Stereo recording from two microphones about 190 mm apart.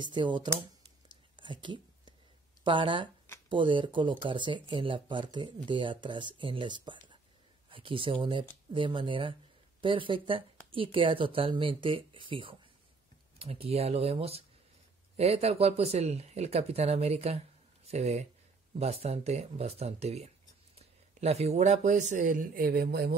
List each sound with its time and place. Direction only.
0.0 s speech: 25° right (ahead or behind)
1.3 s a sound: 25° right (ahead or behind)
2.6 s speech: 25° right (ahead or behind); by 23.1 s 50° right (ahead or behind)